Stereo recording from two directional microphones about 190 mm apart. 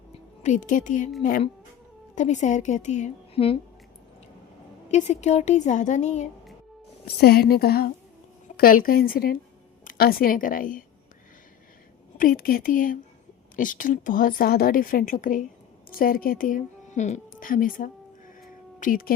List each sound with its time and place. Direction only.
0.4 s a woman's voice: 40° left (ahead or behind)
4.9 s a woman's voice: 35° left (ahead or behind)
7.2 s a woman's voice: 55° left (ahead or behind)
12.1 s speech: 50° left (ahead or behind)
18.3 s a sound: 45° left (ahead or behind)